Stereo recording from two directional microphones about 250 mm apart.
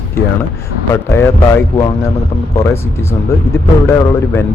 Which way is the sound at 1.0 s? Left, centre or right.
Centre.